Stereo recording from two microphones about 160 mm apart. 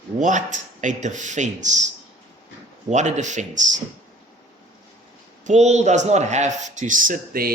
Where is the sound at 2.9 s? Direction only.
50° right (ahead or behind).